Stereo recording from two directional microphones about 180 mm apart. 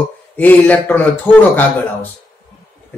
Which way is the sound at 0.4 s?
10° left (ahead or behind).